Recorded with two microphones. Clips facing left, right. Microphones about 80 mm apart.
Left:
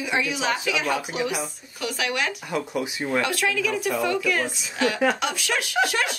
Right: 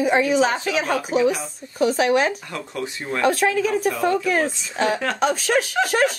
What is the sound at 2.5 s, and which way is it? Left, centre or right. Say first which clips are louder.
Speech: left 2 dB; centre.